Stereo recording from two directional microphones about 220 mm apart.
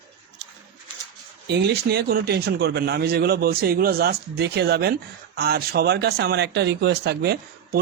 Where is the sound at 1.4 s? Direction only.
50° right (ahead or behind).